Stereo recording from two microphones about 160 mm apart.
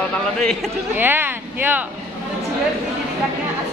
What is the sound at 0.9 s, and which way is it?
Speech, 10° right (ahead or behind).